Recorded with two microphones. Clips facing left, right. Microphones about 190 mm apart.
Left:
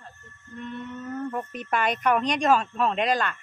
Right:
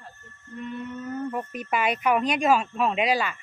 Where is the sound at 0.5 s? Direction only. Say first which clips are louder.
Right 2 dB; 5° right (ahead or behind).